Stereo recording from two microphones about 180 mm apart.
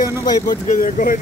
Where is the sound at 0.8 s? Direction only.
50° left (ahead or behind).